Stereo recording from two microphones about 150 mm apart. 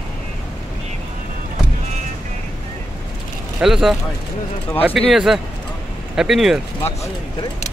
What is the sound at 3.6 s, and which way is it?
Speech, 5° right (ahead or behind).